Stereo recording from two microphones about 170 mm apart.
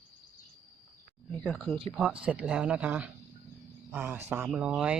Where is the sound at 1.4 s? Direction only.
Centre (ahead or behind).